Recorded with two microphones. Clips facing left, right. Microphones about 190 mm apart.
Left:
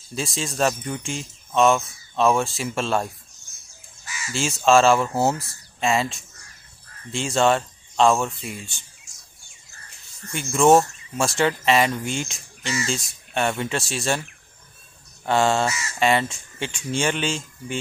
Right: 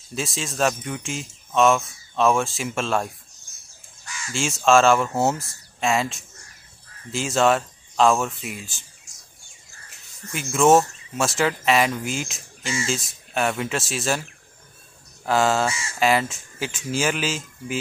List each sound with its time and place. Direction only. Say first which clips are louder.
0.1 s speech: left 1 dB; centre (ahead or behind)
9.8 s speech: right 1 dB; centre (ahead or behind)
15.2 s speech: even; centre (ahead or behind)